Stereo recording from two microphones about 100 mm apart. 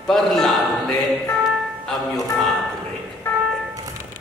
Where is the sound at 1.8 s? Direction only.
Centre (ahead or behind).